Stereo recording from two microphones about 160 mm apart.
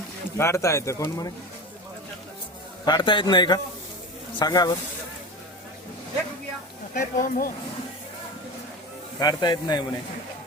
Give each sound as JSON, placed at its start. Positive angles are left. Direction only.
{"t": 0.3, "sound": "speech", "side_deg": 15}
{"t": 2.8, "sound": "a man's voice", "side_deg": 30}
{"t": 6.9, "sound": "speech", "side_deg": 65}
{"t": 9.1, "sound": "a man's voice", "side_deg": 25}